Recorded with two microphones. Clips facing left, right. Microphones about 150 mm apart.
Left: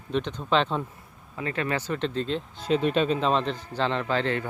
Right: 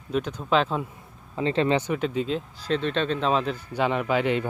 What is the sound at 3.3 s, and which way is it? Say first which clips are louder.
A man's voice: right 1 dB; 5° right (ahead or behind).